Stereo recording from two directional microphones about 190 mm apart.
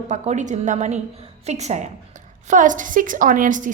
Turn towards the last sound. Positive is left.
turn(degrees=-45)  # may be behind; listen again after turning